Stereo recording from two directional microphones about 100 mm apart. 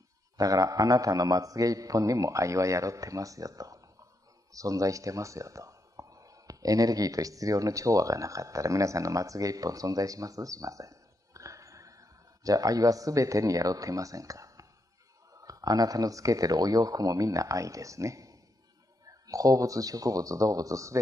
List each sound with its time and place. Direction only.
0.4 s a man's voice: 35° right (ahead or behind)